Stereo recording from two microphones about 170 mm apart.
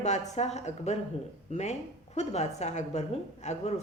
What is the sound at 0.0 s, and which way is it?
A woman's voice, 45° left (ahead or behind).